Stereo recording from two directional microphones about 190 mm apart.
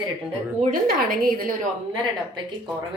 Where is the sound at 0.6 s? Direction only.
45° right (ahead or behind).